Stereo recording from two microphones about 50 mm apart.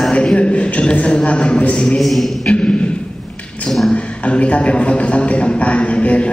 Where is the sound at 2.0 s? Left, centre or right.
Centre.